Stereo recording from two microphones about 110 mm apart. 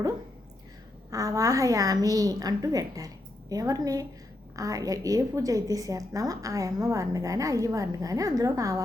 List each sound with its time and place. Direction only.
1.1 s a woman's voice: 30° right (ahead or behind)